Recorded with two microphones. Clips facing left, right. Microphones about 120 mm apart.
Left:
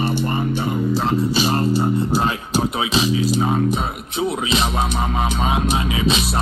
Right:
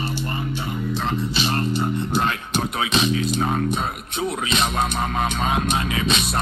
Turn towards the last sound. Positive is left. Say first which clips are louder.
# left 2 dB
turn(degrees=15)  # may be behind; listen again after turning